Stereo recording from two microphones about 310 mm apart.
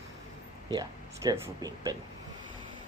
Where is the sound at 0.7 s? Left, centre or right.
Centre.